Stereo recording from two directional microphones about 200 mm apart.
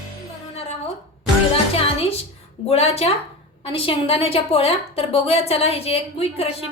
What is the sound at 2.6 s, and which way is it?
A woman's voice, 30° left (ahead or behind).